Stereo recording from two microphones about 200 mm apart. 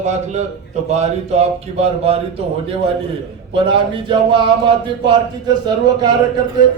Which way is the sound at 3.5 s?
25° right (ahead or behind).